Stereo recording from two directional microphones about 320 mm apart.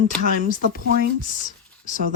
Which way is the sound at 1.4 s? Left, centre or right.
Left.